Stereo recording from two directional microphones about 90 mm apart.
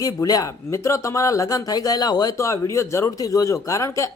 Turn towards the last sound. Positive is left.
turn(degrees=35)  # may be behind; listen again after turning